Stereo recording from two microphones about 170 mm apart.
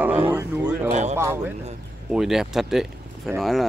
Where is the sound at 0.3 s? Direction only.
15° right (ahead or behind).